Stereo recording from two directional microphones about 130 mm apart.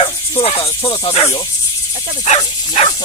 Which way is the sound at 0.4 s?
50° left (ahead or behind).